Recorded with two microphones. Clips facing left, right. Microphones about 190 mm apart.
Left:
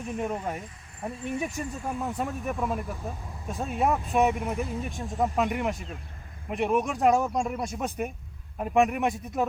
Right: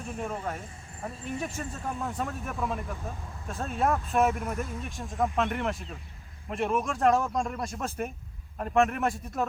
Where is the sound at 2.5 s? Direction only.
Centre (ahead or behind).